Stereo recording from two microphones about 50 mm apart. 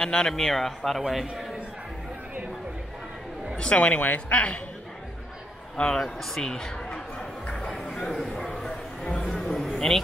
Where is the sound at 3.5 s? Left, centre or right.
Left.